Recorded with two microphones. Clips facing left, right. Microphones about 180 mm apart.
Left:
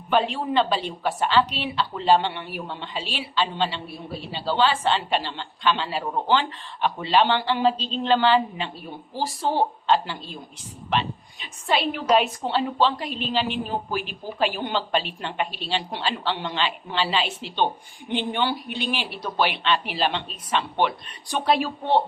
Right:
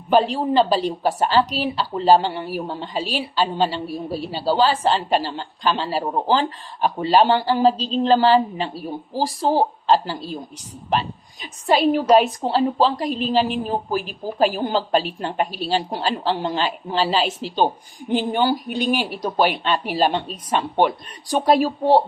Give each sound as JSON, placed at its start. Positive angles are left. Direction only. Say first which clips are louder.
{"t": 0.1, "sound": "a woman's voice", "louder": "right 5 dB", "side_deg": -35}